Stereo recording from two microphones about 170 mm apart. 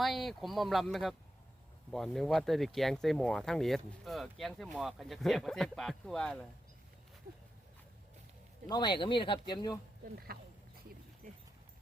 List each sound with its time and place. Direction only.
0.0 s speech: centre (ahead or behind)
8.7 s speech: 25° left (ahead or behind)
10.3 s speech: 60° right (ahead or behind)